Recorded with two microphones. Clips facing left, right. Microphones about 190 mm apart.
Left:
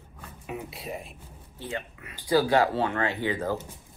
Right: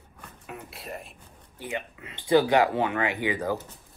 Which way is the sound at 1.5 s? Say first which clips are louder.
Right 1 dB; 20° right (ahead or behind).